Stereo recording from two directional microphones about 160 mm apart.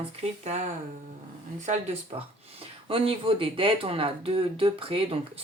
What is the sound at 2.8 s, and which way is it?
Speech, 35° right (ahead or behind).